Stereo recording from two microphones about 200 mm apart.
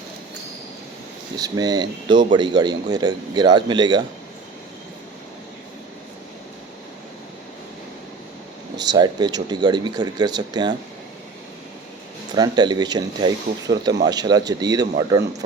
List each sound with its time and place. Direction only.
1.4 s speech: 20° right (ahead or behind)
8.8 s speech: 20° right (ahead or behind)
12.3 s speech: 20° right (ahead or behind)